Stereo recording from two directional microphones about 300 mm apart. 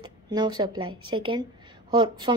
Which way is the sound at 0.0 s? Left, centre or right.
Centre.